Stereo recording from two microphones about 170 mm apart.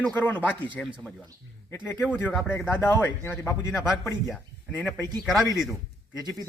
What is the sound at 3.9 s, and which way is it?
Speech, centre (ahead or behind).